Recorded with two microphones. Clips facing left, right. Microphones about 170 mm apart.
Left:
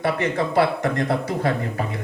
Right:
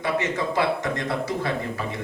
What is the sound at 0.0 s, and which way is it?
Speech, 55° left (ahead or behind).